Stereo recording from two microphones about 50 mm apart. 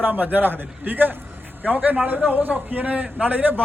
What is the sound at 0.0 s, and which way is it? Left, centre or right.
A man's voice, right.